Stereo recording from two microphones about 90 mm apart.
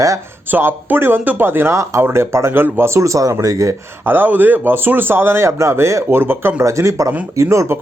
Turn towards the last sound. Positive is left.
turn(degrees=-35)  # may be behind; listen again after turning